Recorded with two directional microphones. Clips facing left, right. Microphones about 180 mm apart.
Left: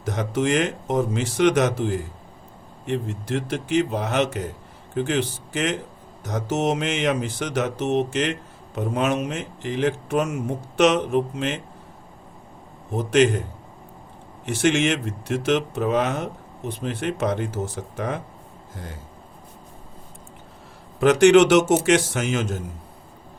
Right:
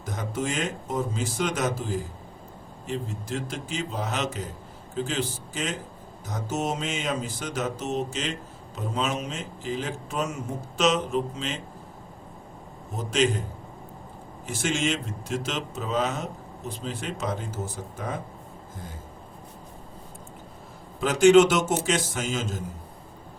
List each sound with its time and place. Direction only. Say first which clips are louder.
0.0 s speech: left 7 dB; 75° left (ahead or behind)
13.0 s speech: left 6 dB; 65° left (ahead or behind)
14.4 s speech: left 7 dB; 65° left (ahead or behind)
21.0 s speech: left 3 dB; 70° left (ahead or behind)